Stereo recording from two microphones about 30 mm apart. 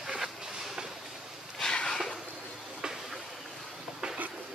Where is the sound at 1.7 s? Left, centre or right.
Left.